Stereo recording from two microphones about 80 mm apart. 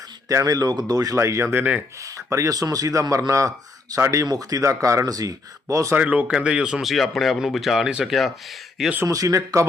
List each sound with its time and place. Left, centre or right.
0.3 s speech: right
1.1 s speech: right
5.9 s speech: centre
6.8 s speech: centre
9.0 s speech: right